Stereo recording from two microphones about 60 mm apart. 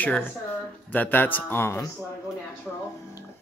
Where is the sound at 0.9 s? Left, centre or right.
Left.